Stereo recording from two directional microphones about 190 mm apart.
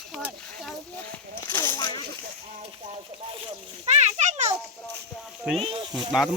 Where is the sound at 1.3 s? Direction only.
10° left (ahead or behind).